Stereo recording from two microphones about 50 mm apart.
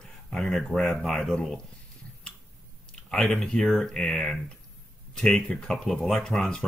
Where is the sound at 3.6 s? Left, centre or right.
Centre.